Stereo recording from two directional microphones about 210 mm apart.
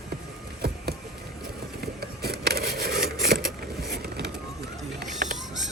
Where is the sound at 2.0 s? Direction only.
50° right (ahead or behind).